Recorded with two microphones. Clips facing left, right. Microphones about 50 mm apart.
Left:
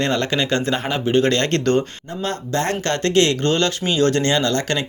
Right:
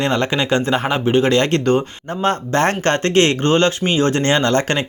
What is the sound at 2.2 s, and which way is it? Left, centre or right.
Speech, right.